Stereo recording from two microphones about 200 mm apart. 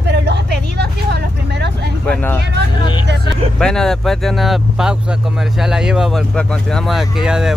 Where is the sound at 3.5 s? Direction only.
5° left (ahead or behind).